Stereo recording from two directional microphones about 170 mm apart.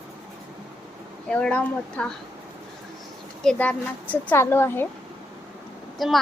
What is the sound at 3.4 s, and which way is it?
A woman's voice, 5° left (ahead or behind).